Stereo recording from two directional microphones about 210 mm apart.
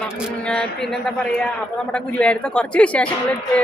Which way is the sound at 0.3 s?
5° left (ahead or behind).